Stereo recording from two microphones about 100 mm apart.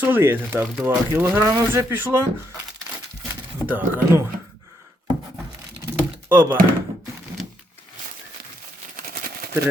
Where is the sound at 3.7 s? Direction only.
20° right (ahead or behind).